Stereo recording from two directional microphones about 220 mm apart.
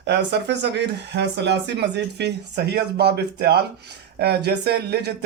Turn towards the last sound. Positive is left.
turn(degrees=-50)  # may be behind; listen again after turning